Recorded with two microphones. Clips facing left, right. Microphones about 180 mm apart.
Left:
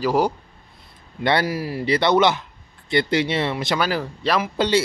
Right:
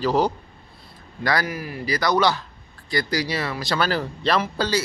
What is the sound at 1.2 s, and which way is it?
Speech, 25° left (ahead or behind).